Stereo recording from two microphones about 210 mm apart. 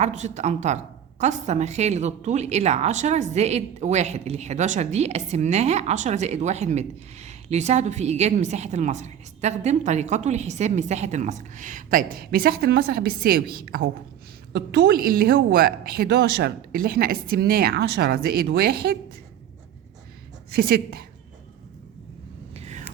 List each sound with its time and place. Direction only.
0.0 s a woman's voice: 35° right (ahead or behind); by 18.9 s 50° right (ahead or behind)
20.5 s a woman's voice: 45° right (ahead or behind)
22.5 s vehicle: 30° right (ahead or behind)